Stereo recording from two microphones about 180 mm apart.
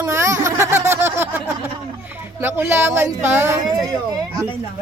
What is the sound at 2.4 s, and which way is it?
Speech, 10° right (ahead or behind).